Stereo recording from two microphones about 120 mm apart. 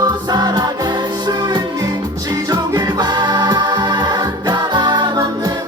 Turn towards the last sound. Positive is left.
turn(degrees=-35)  # may be behind; listen again after turning